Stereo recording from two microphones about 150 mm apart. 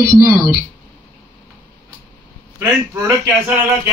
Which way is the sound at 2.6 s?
15° right (ahead or behind).